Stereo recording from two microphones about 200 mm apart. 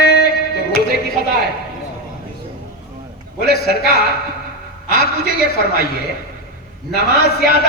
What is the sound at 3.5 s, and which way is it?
Speech, 50° left (ahead or behind).